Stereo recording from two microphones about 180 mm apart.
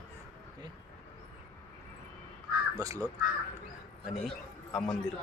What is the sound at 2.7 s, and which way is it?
Speech, 15° right (ahead or behind).